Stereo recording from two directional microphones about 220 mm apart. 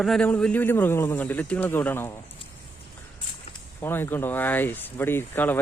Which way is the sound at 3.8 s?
10° left (ahead or behind).